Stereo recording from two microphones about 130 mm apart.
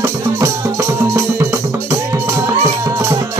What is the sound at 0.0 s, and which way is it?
Music, 25° right (ahead or behind).